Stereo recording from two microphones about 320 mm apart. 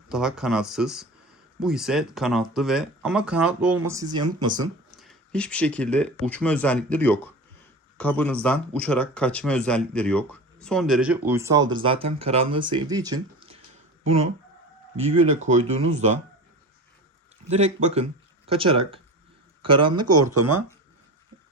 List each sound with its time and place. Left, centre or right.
0.1 s speech: centre
4.9 s speech: centre
15.4 s speech: centre
17.5 s speech: right